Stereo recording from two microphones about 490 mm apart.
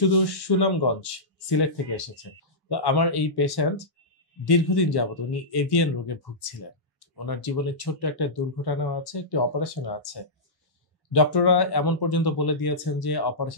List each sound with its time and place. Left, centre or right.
0.3 s speech: left
2.7 s speech: left
11.1 s speech: left